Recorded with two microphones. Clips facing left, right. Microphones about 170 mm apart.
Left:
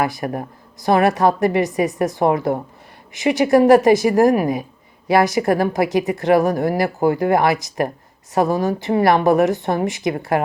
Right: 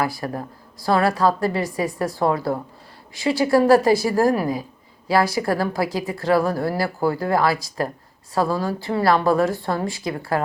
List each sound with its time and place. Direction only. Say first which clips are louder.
0.0 s speech: left 3 dB; 20° left (ahead or behind)